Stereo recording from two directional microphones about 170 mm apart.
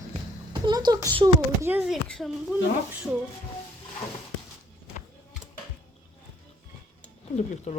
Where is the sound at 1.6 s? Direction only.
10° right (ahead or behind).